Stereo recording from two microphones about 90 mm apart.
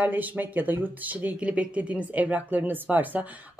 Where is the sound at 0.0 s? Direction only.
20° right (ahead or behind).